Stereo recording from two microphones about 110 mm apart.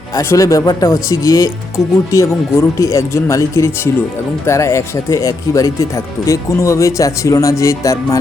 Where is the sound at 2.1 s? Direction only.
30° left (ahead or behind).